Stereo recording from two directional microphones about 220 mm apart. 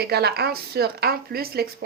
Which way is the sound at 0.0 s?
45° right (ahead or behind).